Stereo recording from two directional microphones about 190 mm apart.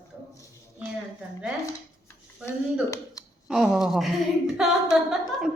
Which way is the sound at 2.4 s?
15° left (ahead or behind).